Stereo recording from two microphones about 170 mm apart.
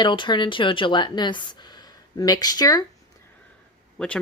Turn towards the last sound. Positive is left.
turn(degrees=5)  # may be behind; listen again after turning